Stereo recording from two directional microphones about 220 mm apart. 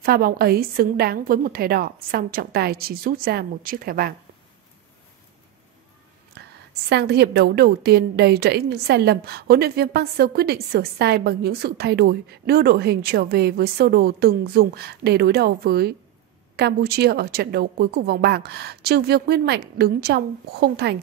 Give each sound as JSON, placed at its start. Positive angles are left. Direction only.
{"t": 0.0, "sound": "a woman's voice", "side_deg": -45}
{"t": 6.4, "sound": "a sound", "side_deg": -50}
{"t": 6.9, "sound": "a woman's voice", "side_deg": -50}